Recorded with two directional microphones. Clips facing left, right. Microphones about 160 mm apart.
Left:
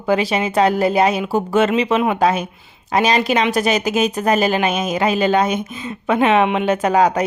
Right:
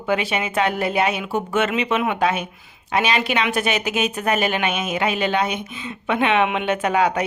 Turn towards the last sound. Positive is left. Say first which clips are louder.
# left 4 dB
turn(degrees=40)  # may be behind; listen again after turning